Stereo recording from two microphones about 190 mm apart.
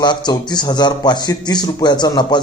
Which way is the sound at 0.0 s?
25° left (ahead or behind).